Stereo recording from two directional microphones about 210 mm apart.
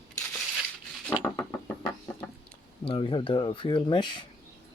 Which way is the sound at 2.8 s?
25° left (ahead or behind).